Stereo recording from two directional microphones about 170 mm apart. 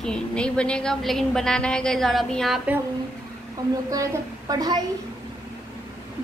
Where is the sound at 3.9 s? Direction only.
20° right (ahead or behind).